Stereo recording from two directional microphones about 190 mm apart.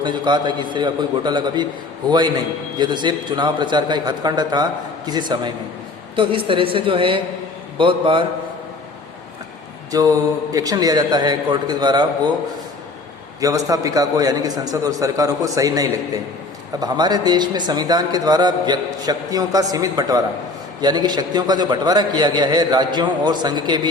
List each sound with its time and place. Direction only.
0.0 s a man's voice: 25° right (ahead or behind)
9.9 s a man's voice: 20° right (ahead or behind)
13.4 s a man's voice: 20° right (ahead or behind)